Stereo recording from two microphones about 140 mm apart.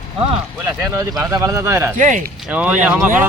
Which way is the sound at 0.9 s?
20° right (ahead or behind).